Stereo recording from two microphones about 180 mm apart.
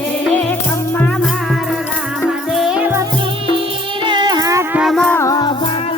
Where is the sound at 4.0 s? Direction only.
25° right (ahead or behind).